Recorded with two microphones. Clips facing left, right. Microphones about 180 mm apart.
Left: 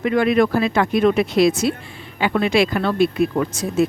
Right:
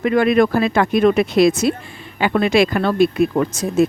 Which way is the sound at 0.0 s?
50° right (ahead or behind).